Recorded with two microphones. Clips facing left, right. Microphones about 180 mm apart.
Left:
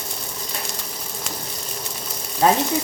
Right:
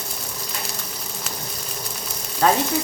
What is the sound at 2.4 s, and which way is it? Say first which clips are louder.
Speech: left 1 dB; 20° left (ahead or behind).